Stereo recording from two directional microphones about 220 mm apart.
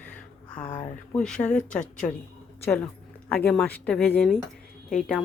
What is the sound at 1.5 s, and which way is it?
Speech, 35° left (ahead or behind).